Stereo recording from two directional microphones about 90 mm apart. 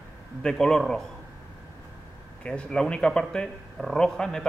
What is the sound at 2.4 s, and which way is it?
Speech, 10° left (ahead or behind).